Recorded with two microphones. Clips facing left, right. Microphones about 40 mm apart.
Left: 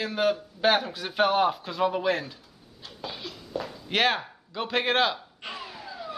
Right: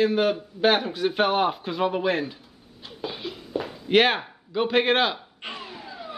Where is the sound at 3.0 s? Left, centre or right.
Centre.